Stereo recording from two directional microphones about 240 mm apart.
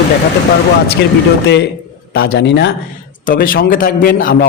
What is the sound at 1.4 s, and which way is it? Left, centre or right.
A man's voice, left.